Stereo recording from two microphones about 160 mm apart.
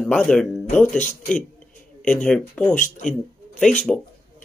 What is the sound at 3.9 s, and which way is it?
Speech, 10° left (ahead or behind).